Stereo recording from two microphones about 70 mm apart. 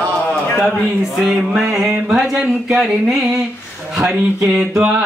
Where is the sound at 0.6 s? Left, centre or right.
Centre.